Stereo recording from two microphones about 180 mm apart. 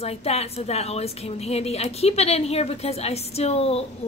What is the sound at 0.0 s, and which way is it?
A woman's voice, 35° left (ahead or behind).